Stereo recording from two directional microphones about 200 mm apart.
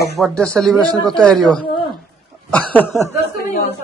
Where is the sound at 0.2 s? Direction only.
5° left (ahead or behind).